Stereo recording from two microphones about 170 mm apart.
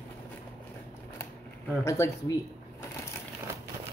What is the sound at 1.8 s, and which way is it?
Speech, 15° left (ahead or behind).